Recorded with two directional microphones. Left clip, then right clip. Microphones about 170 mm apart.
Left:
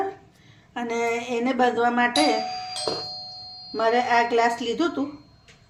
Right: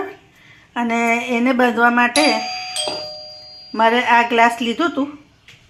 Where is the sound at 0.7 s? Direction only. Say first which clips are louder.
Right 7 dB; 30° right (ahead or behind).